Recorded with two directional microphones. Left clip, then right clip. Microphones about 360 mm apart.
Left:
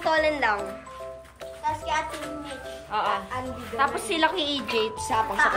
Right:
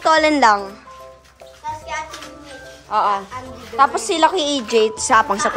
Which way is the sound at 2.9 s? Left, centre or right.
Centre.